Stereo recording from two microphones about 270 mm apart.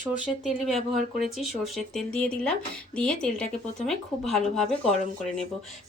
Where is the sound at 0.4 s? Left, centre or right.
Centre.